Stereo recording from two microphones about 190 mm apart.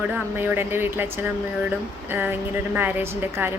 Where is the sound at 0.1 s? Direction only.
10° right (ahead or behind).